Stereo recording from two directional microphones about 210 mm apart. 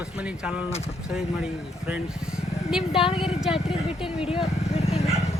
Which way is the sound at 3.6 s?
25° left (ahead or behind).